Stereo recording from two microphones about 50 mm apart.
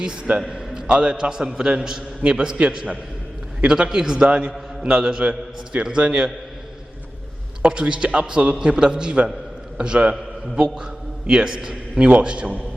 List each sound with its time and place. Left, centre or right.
0.0 s a man's voice: centre
7.7 s a man's voice: centre